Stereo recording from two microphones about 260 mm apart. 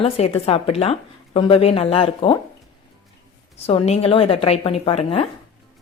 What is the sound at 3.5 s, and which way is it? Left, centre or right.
Speech, left.